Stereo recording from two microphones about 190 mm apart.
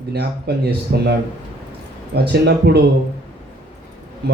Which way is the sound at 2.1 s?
60° right (ahead or behind).